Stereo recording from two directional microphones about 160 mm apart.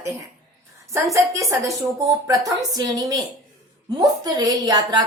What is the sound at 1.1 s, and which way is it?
Speech, 20° right (ahead or behind).